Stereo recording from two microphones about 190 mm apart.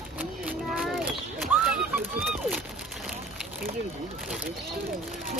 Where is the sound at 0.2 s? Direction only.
5° right (ahead or behind).